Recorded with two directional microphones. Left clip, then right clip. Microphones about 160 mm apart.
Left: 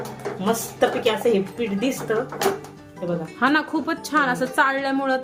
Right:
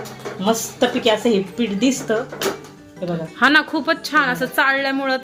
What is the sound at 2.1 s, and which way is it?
Speech, 55° right (ahead or behind).